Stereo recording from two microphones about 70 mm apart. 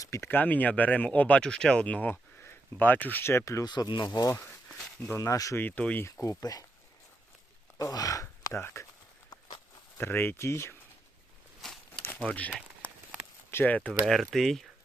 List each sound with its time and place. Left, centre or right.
0.0 s speech: left
0.3 s speech: left
1.4 s speech: centre
2.4 s speech: left
3.6 s speech: left
5.1 s speech: left
5.5 s speech: left
6.1 s speech: left
6.4 s speech: left
7.8 s speech: left
8.5 s speech: left
10.0 s speech: left
13.7 s speech: centre
14.0 s speech: centre